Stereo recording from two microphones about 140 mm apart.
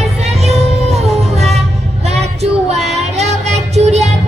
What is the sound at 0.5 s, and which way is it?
Music, 50° right (ahead or behind).